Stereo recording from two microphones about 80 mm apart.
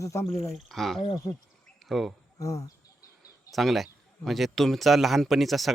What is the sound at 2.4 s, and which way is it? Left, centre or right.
Speech, left.